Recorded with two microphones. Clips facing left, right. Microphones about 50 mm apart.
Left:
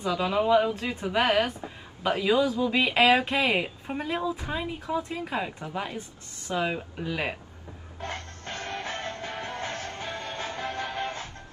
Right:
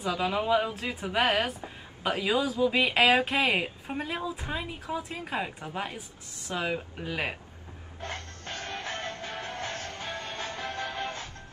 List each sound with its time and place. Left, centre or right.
0.0 s speech: centre
8.0 s music: left